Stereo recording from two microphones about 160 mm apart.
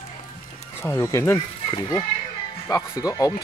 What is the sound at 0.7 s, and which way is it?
Speech, 15° left (ahead or behind).